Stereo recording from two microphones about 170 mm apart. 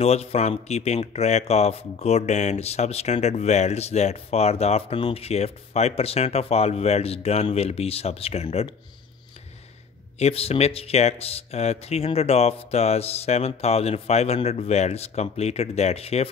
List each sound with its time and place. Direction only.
0.0 s speech: 40° left (ahead or behind)
10.1 s speech: 40° left (ahead or behind)